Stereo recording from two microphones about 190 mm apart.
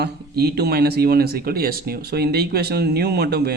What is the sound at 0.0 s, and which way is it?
Speech, 60° right (ahead or behind).